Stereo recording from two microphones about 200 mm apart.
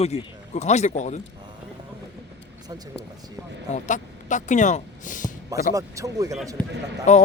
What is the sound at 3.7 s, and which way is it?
Speech, 40° left (ahead or behind).